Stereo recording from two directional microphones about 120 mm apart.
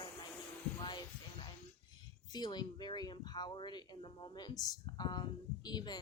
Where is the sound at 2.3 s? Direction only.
35° left (ahead or behind).